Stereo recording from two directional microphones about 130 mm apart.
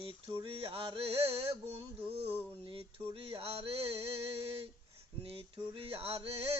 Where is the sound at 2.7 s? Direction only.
45° right (ahead or behind).